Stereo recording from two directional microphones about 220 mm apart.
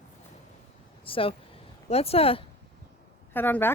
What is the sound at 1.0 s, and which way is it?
Speech, 25° left (ahead or behind).